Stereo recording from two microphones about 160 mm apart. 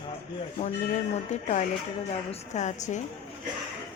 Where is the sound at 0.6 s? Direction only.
45° left (ahead or behind).